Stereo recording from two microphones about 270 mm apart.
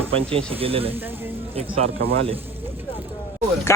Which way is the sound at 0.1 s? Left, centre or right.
Right.